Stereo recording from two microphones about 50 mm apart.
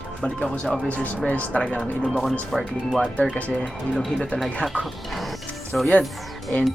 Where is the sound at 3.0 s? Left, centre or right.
Left.